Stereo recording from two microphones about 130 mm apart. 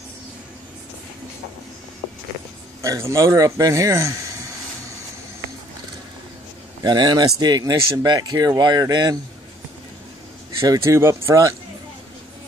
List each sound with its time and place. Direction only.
2.8 s speech: 25° right (ahead or behind)
6.8 s speech: 35° right (ahead or behind)
10.7 s speech: 20° right (ahead or behind)